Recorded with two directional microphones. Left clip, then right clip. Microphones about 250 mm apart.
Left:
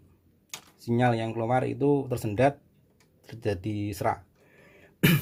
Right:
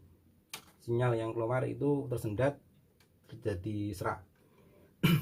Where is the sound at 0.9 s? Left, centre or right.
Left.